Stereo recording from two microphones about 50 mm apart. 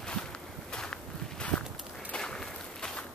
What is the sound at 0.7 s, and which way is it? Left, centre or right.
Walk, centre.